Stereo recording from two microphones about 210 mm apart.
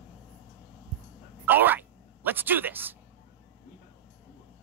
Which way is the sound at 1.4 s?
10° right (ahead or behind).